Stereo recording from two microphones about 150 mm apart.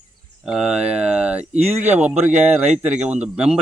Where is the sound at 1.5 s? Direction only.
45° right (ahead or behind).